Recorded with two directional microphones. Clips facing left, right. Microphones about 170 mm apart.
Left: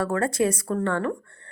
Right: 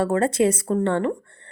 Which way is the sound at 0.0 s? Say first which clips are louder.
Right 4 dB; 25° right (ahead or behind).